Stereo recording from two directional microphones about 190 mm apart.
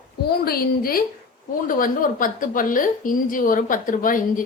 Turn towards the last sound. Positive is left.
turn(degrees=45)  # may be behind; listen again after turning